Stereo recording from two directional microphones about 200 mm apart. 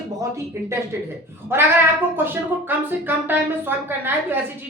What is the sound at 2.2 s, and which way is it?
Speech, 10° right (ahead or behind).